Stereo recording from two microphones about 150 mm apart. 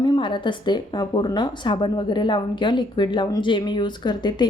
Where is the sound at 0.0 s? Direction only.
30° left (ahead or behind).